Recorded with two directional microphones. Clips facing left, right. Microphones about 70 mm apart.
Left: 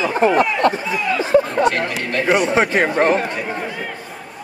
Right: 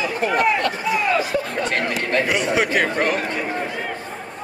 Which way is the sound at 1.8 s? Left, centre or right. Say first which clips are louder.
Right 1 dB; right.